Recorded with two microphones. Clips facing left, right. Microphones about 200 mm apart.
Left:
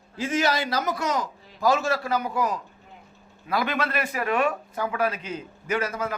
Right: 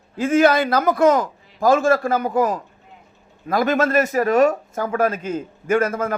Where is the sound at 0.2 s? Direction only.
55° right (ahead or behind).